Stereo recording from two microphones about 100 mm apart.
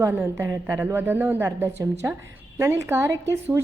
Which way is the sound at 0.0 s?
25° right (ahead or behind).